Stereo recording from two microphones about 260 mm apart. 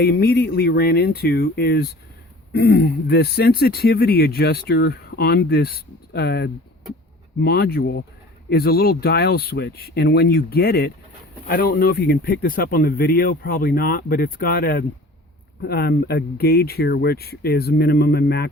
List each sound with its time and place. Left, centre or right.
0.0 s speech: left